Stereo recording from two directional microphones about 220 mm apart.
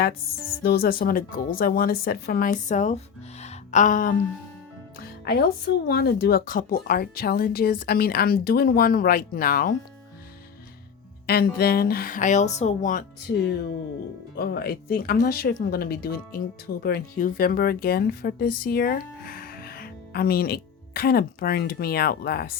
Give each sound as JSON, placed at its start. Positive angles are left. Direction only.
{"t": 0.6, "sound": "speech", "side_deg": 45}
{"t": 3.4, "sound": "music", "side_deg": 30}
{"t": 4.9, "sound": "speech", "side_deg": 45}
{"t": 11.3, "sound": "speech", "side_deg": 45}